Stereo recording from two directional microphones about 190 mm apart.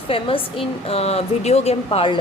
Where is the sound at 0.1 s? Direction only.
30° left (ahead or behind).